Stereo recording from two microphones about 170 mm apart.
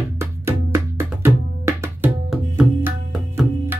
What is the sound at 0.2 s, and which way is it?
Music, 15° right (ahead or behind).